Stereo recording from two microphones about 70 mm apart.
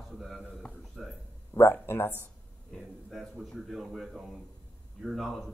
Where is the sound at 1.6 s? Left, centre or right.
Left.